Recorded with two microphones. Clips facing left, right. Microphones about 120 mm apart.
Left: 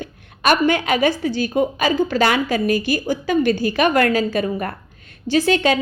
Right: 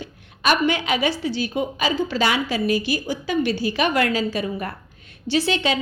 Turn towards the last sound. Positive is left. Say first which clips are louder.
# left 5 dB
turn(degrees=50)  # may be behind; listen again after turning